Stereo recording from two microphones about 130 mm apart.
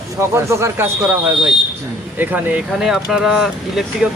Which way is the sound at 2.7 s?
5° right (ahead or behind).